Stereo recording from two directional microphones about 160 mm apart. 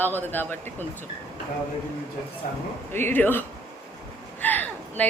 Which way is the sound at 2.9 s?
15° left (ahead or behind).